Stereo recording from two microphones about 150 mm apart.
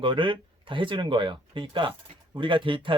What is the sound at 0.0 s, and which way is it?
Speech, 35° right (ahead or behind).